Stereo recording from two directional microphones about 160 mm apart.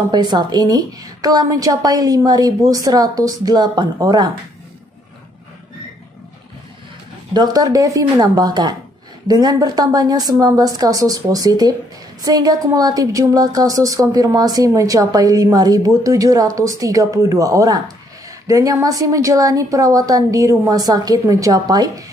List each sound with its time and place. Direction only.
0.1 s a woman's voice: 25° right (ahead or behind)
7.3 s a woman's voice: 25° right (ahead or behind)